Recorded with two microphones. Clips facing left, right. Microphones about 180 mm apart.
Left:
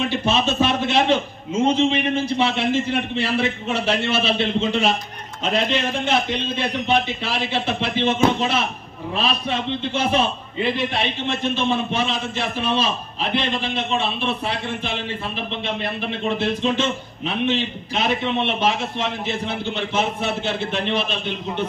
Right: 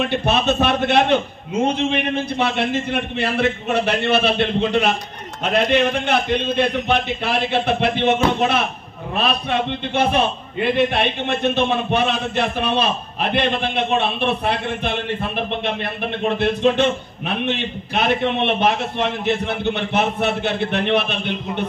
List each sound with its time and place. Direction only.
0.1 s a man's voice: 60° right (ahead or behind)